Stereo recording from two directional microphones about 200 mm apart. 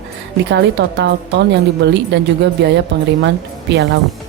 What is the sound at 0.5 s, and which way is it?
Speech, 60° right (ahead or behind).